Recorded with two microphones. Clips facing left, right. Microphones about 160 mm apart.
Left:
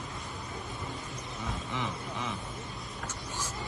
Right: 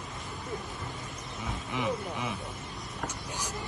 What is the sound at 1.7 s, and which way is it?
Speech, 15° right (ahead or behind).